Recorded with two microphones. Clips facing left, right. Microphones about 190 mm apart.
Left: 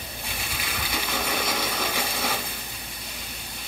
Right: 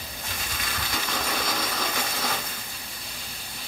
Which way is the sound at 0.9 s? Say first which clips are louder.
Left 2 dB; 5° left (ahead or behind).